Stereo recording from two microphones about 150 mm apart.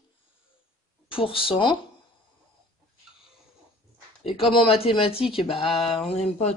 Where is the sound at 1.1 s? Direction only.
35° left (ahead or behind).